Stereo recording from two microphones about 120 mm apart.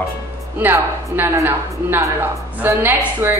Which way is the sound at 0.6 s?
15° right (ahead or behind).